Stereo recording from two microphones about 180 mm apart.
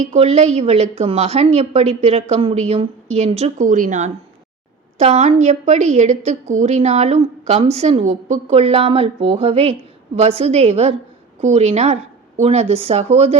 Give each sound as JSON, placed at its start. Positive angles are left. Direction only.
{"t": 0.0, "sound": "a woman's voice", "side_deg": -40}